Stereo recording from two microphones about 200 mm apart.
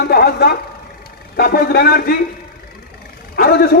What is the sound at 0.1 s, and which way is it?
A man's voice, 50° left (ahead or behind).